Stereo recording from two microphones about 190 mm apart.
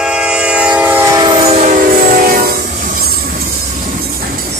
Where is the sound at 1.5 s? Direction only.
35° right (ahead or behind).